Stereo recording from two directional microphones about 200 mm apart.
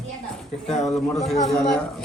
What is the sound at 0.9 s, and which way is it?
Speech, centre (ahead or behind).